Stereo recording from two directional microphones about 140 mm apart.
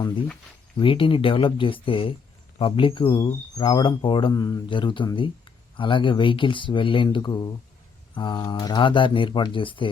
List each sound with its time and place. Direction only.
0.8 s speech: 40° left (ahead or behind)